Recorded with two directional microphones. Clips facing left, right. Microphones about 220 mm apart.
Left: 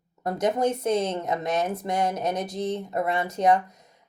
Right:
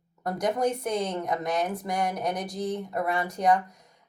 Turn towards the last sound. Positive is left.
turn(degrees=25)  # may be behind; listen again after turning